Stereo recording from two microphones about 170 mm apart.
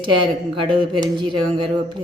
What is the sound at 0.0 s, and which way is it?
Speech, 30° right (ahead or behind).